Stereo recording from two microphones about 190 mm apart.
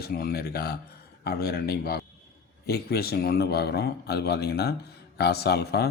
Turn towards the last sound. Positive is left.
turn(degrees=60)  # may be behind; listen again after turning